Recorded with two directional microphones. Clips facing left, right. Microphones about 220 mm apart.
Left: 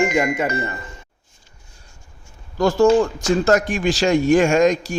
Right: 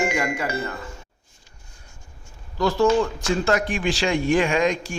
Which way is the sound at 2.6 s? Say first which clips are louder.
Left 4 dB; 45° left (ahead or behind).